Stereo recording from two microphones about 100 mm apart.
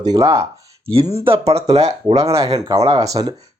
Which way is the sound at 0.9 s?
80° right.